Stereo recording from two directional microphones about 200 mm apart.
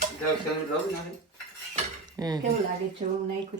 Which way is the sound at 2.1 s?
20° right (ahead or behind).